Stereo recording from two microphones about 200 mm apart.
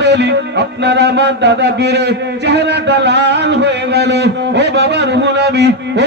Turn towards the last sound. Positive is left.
turn(degrees=-55)  # may be behind; listen again after turning